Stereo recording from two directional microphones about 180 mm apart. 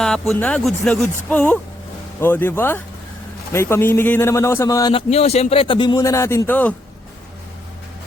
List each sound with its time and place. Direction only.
0.0 s a man's voice: 5° left (ahead or behind)